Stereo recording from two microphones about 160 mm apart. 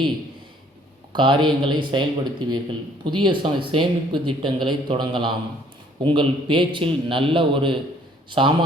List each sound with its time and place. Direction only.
1.1 s speech: 30° right (ahead or behind)